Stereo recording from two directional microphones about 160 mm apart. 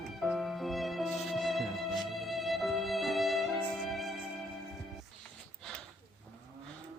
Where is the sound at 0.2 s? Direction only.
Centre (ahead or behind).